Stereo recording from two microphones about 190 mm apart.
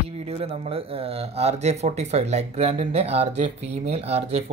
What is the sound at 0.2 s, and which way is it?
Speech, 35° right (ahead or behind).